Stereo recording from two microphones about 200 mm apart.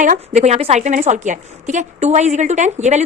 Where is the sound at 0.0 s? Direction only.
35° right (ahead or behind).